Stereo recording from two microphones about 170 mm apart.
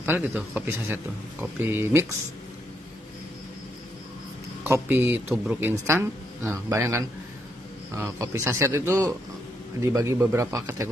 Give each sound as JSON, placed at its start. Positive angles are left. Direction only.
{"t": 0.0, "sound": "speech", "side_deg": -10}
{"t": 4.6, "sound": "speech", "side_deg": -15}